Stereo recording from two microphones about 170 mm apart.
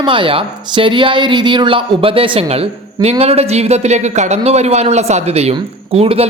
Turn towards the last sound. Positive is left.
turn(degrees=-35)  # may be behind; listen again after turning